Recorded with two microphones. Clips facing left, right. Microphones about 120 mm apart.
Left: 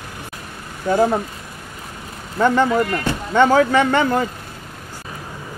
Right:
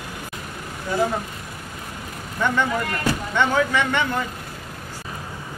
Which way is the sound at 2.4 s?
35° left (ahead or behind).